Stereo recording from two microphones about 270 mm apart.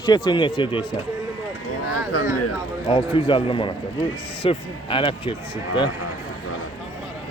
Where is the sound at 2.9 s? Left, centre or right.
Centre.